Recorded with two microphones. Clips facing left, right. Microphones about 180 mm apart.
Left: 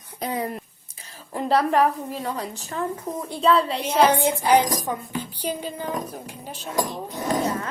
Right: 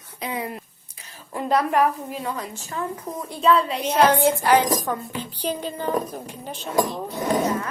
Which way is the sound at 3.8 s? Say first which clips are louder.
Right 2 dB; 10° left (ahead or behind).